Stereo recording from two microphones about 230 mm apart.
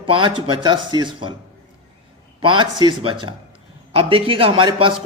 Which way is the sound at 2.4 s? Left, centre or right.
Right.